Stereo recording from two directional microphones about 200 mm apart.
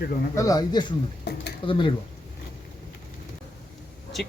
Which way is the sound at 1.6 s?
25° left (ahead or behind).